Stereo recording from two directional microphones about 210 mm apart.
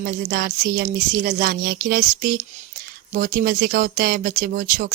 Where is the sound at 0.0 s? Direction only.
45° right (ahead or behind).